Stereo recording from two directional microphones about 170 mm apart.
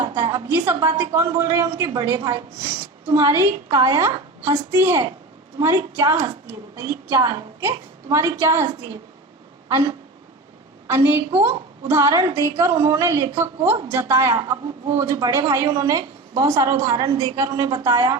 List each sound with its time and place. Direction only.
0.1 s a woman's voice: 20° right (ahead or behind)
10.8 s a woman's voice: 15° right (ahead or behind)